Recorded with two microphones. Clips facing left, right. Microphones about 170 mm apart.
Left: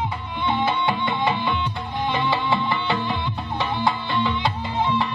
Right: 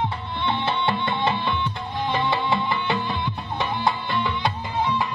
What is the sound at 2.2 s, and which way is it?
Music, 20° right (ahead or behind).